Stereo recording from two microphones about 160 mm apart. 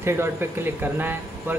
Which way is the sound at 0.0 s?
15° right (ahead or behind).